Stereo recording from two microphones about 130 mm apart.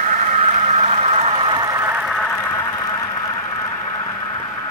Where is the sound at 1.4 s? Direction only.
30° right (ahead or behind).